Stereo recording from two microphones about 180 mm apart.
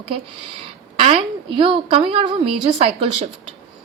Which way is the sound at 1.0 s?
30° right (ahead or behind).